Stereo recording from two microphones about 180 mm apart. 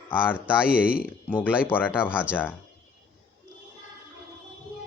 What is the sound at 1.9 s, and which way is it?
Speech, 5° right (ahead or behind).